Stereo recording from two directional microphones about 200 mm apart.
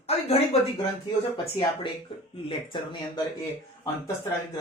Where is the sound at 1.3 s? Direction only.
25° left (ahead or behind).